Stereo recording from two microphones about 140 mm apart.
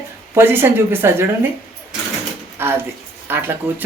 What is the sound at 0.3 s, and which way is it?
Speech, 15° right (ahead or behind).